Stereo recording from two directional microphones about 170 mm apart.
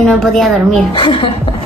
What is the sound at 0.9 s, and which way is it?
Speech, 30° left (ahead or behind).